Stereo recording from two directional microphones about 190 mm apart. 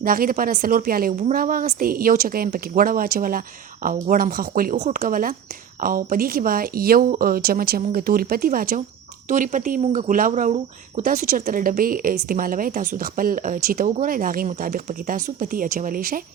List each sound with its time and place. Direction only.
0.0 s speech: 50° right (ahead or behind)